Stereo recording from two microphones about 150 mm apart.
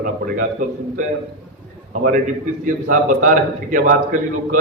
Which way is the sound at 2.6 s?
60° right (ahead or behind).